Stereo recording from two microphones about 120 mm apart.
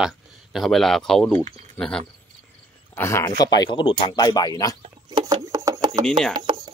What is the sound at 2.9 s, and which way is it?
Speech, 25° left (ahead or behind).